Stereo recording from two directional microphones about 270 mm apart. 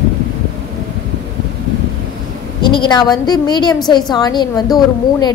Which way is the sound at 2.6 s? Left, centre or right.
Centre.